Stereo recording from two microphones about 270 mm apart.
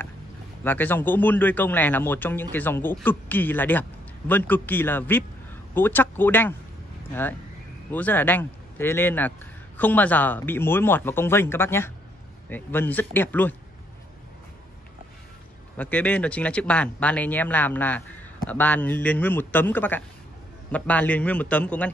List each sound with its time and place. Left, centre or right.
0.7 s speech: centre
7.9 s speech: centre
15.8 s speech: centre